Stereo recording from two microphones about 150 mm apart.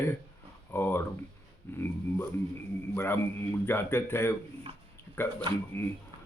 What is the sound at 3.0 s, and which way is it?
Speech, 15° left (ahead or behind).